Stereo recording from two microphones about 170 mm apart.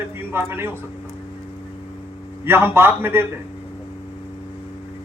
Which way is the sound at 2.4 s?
15° right (ahead or behind).